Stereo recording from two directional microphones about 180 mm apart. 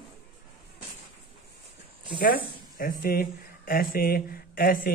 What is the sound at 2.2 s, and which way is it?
Speech, 55° left (ahead or behind).